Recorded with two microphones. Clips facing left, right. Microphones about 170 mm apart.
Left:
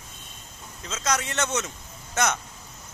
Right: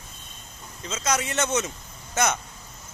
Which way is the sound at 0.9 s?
Centre (ahead or behind).